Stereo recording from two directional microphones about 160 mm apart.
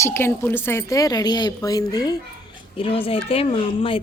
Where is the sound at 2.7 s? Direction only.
35° left (ahead or behind).